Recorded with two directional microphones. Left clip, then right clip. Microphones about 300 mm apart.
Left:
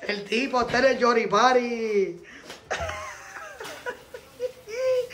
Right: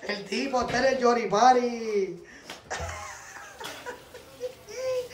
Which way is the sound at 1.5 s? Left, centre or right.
Right.